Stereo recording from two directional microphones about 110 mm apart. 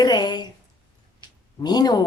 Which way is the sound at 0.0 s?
40° left (ahead or behind).